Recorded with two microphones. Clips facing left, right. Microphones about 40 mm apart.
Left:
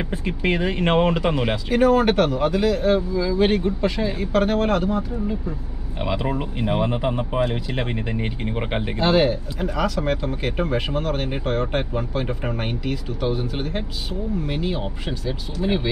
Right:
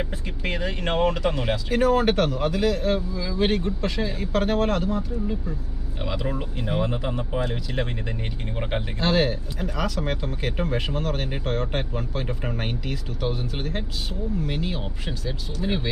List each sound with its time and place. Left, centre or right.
0.1 s speech: left
1.7 s speech: centre
6.0 s speech: left
9.0 s speech: centre